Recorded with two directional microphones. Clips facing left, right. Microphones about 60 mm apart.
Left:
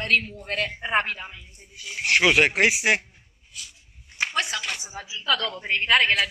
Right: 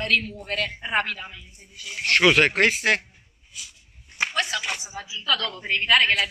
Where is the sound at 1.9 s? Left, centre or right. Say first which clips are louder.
Right 1 dB; centre.